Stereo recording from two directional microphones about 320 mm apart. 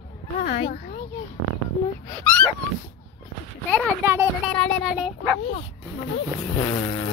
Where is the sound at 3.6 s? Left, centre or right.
Centre.